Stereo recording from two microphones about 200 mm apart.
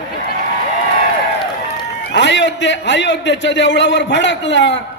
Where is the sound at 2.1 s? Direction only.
65° left (ahead or behind).